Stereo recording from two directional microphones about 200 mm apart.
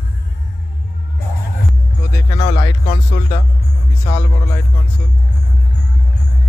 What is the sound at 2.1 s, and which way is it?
Music, 20° left (ahead or behind).